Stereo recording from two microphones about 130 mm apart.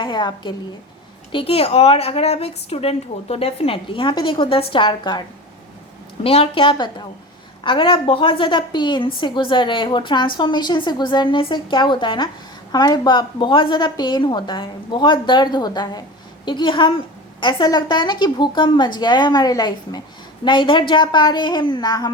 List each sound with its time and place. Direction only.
0.0 s a woman's voice: 35° left (ahead or behind)
6.2 s a woman's voice: 45° left (ahead or behind); by 22.1 s 30° left (ahead or behind)